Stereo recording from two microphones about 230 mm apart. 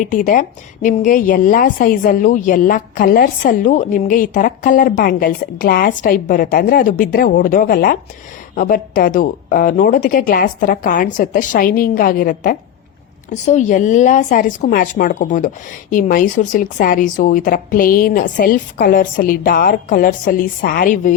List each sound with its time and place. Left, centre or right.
0.1 s speech: left